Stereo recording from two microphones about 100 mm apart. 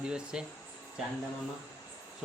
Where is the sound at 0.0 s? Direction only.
10° right (ahead or behind).